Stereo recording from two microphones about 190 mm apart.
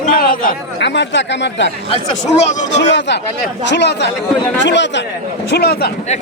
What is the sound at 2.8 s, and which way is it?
Speech, 65° left (ahead or behind).